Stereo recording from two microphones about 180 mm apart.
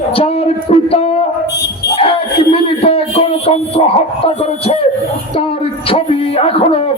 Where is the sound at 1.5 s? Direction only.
70° left (ahead or behind).